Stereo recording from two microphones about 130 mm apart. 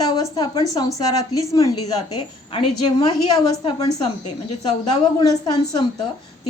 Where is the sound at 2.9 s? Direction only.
35° left (ahead or behind).